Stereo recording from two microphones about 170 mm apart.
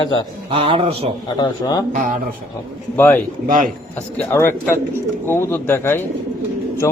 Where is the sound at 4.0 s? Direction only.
10° left (ahead or behind).